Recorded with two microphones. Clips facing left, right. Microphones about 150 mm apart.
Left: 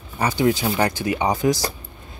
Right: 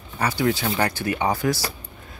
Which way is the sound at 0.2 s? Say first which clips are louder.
Left 3 dB; 20° left (ahead or behind).